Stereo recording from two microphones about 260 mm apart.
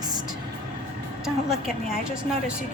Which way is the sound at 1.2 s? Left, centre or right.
Centre.